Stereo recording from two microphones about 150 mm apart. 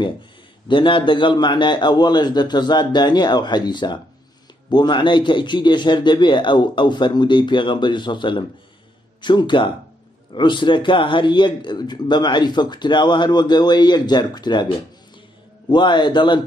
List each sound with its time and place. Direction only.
0.7 s a man's voice: 35° left (ahead or behind)
15.7 s a man's voice: 30° left (ahead or behind)